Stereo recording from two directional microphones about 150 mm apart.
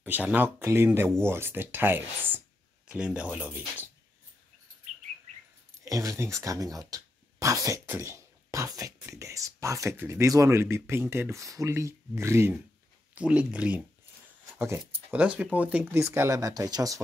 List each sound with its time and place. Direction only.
0.0 s speech: 10° right (ahead or behind)
5.9 s speech: 20° right (ahead or behind)